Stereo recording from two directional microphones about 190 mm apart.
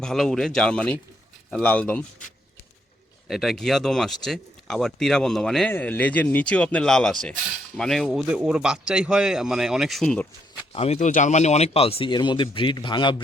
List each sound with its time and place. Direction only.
0.0 s speech: centre (ahead or behind)
3.2 s speech: centre (ahead or behind)
10.7 s speech: 35° left (ahead or behind)